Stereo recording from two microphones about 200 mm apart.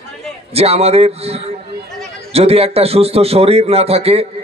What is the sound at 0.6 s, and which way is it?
A man's voice, 30° right (ahead or behind).